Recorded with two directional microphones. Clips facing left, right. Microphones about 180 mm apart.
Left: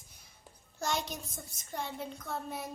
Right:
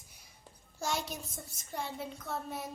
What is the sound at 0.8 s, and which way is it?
Speech, 5° right (ahead or behind).